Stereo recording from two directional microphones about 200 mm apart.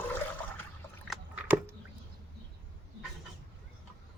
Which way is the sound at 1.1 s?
Centre (ahead or behind).